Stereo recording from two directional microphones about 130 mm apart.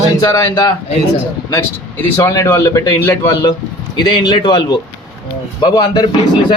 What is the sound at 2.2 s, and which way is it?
A man's voice, 20° left (ahead or behind).